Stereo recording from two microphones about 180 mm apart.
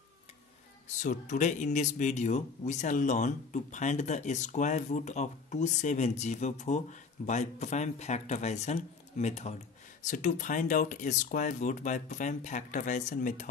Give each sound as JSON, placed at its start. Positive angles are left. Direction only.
{"t": 1.0, "sound": "speech", "side_deg": 45}